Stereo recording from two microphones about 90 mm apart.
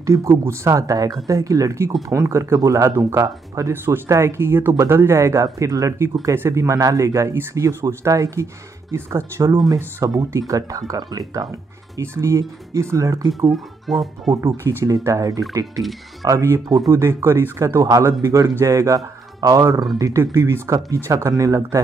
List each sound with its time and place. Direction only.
0.0 s speech: 35° right (ahead or behind)
3.7 s speech: 25° right (ahead or behind); by 11.4 s 45° right (ahead or behind)
12.0 s speech: 30° right (ahead or behind)
13.5 s speech: centre (ahead or behind)
14.4 s speech: 25° right (ahead or behind)
15.0 s speech: 40° right (ahead or behind)
15.8 s speech: centre (ahead or behind)
16.3 s speech: 35° right (ahead or behind)
16.6 s speech: 50° right (ahead or behind)
16.9 s speech: 25° right (ahead or behind)